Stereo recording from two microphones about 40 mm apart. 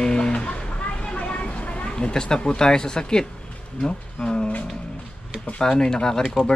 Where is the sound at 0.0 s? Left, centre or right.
Centre.